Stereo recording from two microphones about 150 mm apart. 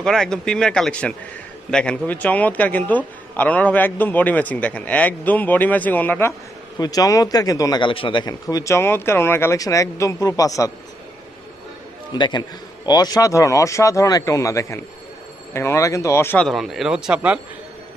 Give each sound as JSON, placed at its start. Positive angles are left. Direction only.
{"t": 0.0, "sound": "a man's voice", "side_deg": 5}
{"t": 6.8, "sound": "a man's voice", "side_deg": 25}
{"t": 12.1, "sound": "a man's voice", "side_deg": 30}
{"t": 16.4, "sound": "speech", "side_deg": 0}